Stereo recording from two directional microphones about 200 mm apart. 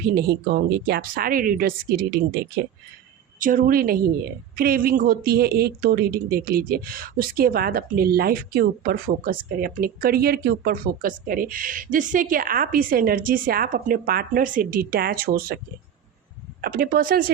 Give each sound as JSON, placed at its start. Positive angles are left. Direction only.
{"t": 0.0, "sound": "a woman's voice", "side_deg": -50}
{"t": 16.6, "sound": "a woman's voice", "side_deg": -50}